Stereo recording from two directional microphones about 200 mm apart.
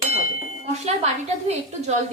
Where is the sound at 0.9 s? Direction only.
35° right (ahead or behind).